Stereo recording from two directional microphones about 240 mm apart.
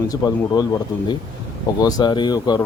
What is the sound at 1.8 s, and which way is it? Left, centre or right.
Speech, centre.